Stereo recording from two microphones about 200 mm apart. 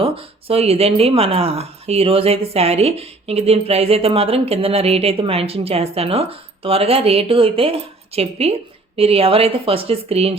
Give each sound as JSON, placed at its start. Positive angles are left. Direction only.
{"t": 0.0, "sound": "speech", "side_deg": -30}